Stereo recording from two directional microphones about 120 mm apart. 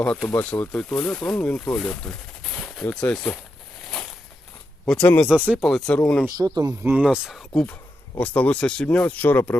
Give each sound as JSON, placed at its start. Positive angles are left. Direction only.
{"t": 0.3, "sound": "speech", "side_deg": 15}
{"t": 4.9, "sound": "speech", "side_deg": 15}
{"t": 5.3, "sound": "speech", "side_deg": -10}
{"t": 5.5, "sound": "speech", "side_deg": 0}
{"t": 6.2, "sound": "speech", "side_deg": -30}
{"t": 6.8, "sound": "speech", "side_deg": -10}
{"t": 8.2, "sound": "speech", "side_deg": 10}